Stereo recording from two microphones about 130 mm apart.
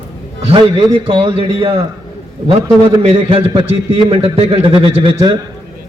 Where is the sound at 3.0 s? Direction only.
45° right (ahead or behind).